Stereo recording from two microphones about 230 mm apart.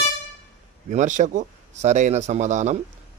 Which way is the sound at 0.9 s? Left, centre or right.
Right.